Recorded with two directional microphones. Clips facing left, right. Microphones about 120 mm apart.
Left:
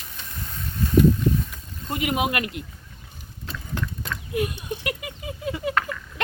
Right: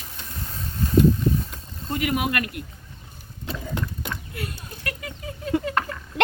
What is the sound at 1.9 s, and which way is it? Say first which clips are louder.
Speech: even; 20° left (ahead or behind).